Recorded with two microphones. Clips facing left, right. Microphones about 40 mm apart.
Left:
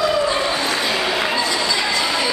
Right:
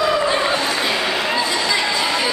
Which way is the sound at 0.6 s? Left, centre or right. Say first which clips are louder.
Even; centre.